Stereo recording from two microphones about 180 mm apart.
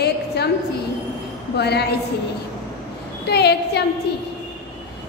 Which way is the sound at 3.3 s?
65° left (ahead or behind).